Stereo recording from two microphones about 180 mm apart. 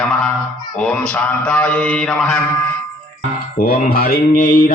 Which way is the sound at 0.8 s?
5° left (ahead or behind).